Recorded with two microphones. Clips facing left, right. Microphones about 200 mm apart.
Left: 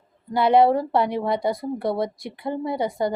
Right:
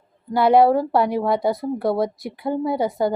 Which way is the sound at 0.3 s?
55° right (ahead or behind).